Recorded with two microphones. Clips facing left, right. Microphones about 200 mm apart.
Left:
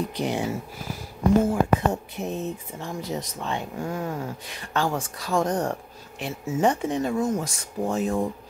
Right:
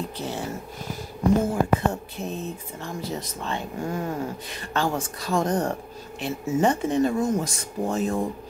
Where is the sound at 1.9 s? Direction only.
20° left (ahead or behind).